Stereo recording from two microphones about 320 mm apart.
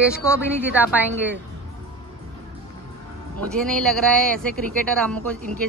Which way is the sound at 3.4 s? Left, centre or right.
Centre.